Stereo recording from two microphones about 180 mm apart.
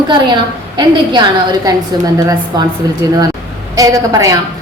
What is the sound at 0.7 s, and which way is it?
A woman's voice, 25° right (ahead or behind).